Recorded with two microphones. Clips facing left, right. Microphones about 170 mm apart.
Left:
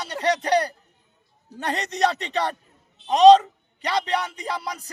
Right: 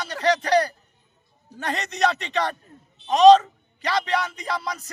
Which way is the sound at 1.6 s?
35° left (ahead or behind).